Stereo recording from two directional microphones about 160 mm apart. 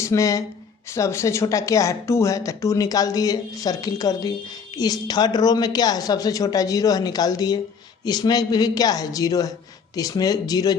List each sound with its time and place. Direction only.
0.0 s a woman's voice: 20° left (ahead or behind)